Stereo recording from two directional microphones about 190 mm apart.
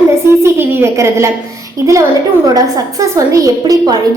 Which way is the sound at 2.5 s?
20° right (ahead or behind).